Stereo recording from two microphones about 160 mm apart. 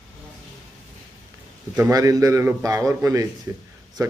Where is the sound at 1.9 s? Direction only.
20° right (ahead or behind).